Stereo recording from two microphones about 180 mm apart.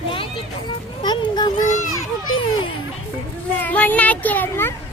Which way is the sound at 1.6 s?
45° left (ahead or behind).